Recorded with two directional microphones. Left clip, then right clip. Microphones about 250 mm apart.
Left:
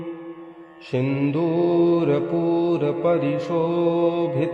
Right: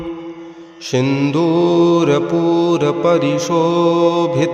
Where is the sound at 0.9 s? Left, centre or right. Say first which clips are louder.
Right 7 dB; right.